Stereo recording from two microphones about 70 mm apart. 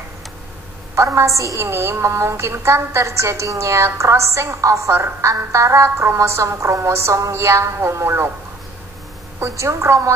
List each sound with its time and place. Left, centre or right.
0.9 s a woman's voice: right
9.4 s a woman's voice: right